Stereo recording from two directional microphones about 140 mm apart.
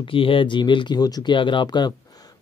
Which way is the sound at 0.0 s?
40° left (ahead or behind).